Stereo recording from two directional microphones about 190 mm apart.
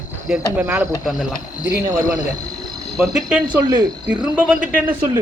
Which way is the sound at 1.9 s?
20° right (ahead or behind).